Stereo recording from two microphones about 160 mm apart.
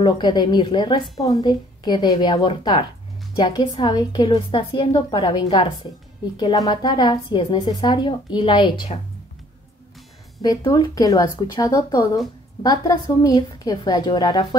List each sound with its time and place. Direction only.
0.0 s a woman's voice: 25° left (ahead or behind)
10.4 s a woman's voice: 25° left (ahead or behind)